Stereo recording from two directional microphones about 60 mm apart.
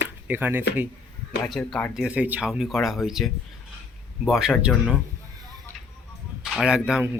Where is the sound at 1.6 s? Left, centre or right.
Left.